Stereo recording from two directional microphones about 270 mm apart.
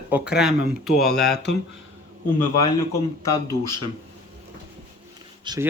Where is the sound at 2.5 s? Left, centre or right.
Centre.